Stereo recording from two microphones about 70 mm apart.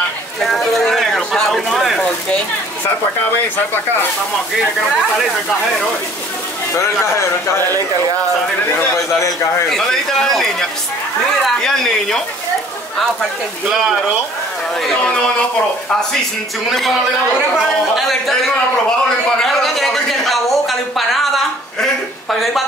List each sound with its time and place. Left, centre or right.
0.4 s a sound: centre
6.7 s a man's voice: left
9.7 s a man's voice: centre
17.6 s a man's voice: centre
19.4 s a sound: centre
22.3 s a man's voice: centre